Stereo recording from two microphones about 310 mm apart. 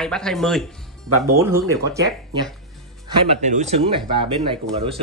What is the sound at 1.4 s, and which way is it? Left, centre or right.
Speech, centre.